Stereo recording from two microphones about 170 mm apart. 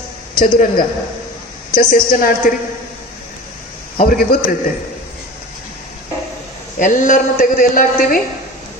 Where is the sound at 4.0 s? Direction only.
60° left (ahead or behind).